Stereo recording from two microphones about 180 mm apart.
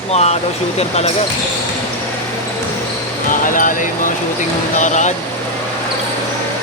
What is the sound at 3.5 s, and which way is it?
Speech, 45° left (ahead or behind).